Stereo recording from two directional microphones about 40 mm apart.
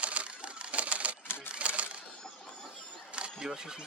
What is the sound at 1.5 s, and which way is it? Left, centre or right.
Typewriter, right.